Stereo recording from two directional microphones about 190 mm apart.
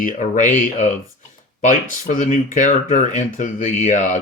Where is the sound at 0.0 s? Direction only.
45° left (ahead or behind).